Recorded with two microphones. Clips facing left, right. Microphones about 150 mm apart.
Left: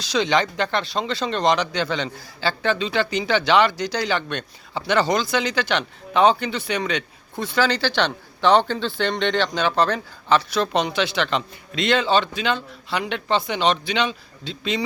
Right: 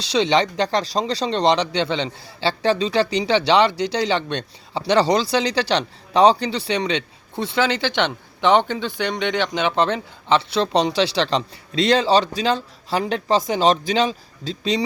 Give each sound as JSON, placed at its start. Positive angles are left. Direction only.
{"t": 0.1, "sound": "speech", "side_deg": -30}